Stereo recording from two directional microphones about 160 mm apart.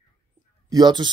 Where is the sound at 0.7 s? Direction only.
25° right (ahead or behind).